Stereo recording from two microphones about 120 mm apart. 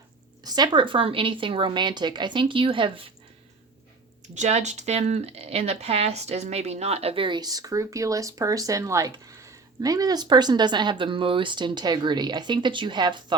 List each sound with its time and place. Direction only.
0.4 s a woman's voice: 35° right (ahead or behind)
4.4 s speech: 75° right (ahead or behind); by 13.2 s 40° right (ahead or behind)